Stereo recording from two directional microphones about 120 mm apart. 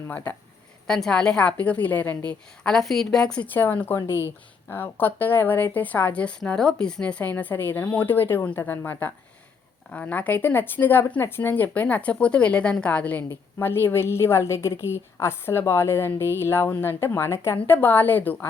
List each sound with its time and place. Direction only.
0.9 s a woman's voice: 5° left (ahead or behind)